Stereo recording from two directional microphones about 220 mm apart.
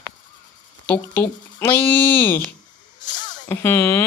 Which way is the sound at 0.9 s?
10° left (ahead or behind).